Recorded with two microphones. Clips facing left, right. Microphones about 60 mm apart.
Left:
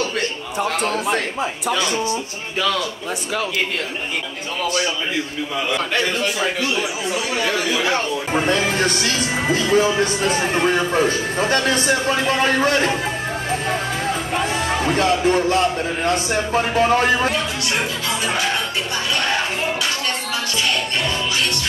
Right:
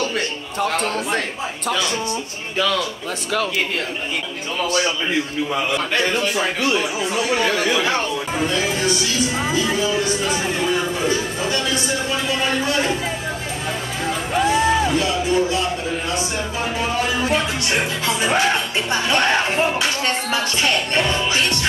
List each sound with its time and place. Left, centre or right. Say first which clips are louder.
0.7 s a man's voice: left 1 dB; centre
8.3 s speech: left 5 dB; left
14.9 s speech: left 3 dB; left